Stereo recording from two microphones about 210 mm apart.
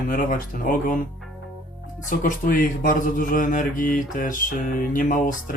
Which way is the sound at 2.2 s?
40° left (ahead or behind).